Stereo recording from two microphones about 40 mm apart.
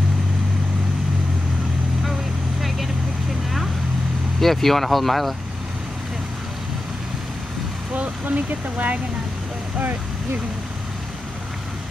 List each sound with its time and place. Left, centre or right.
4.4 s speech: centre
7.9 s speech: right
9.8 s speech: right